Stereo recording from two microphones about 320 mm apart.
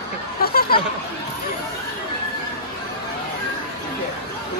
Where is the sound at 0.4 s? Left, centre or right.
Left.